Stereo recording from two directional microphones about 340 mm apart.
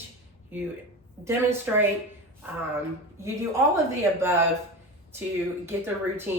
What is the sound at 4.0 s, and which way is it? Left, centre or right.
Speech, centre.